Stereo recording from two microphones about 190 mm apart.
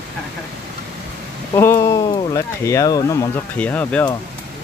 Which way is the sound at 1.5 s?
15° left (ahead or behind).